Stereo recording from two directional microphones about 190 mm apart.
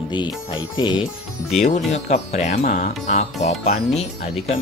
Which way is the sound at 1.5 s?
35° left (ahead or behind).